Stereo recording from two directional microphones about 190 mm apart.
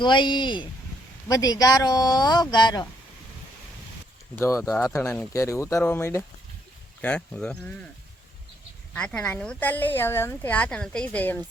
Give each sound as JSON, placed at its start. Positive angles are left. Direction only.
{"t": 0.0, "sound": "speech", "side_deg": 25}
{"t": 4.4, "sound": "speech", "side_deg": 15}
{"t": 8.9, "sound": "speech", "side_deg": 5}